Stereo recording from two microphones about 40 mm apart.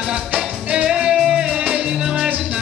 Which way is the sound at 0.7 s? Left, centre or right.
Right.